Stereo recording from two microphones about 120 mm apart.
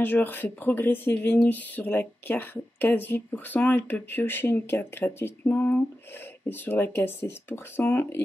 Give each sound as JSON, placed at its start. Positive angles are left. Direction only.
{"t": 0.0, "sound": "speech", "side_deg": 15}